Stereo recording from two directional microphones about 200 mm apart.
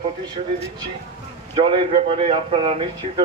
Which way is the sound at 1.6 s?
30° right (ahead or behind).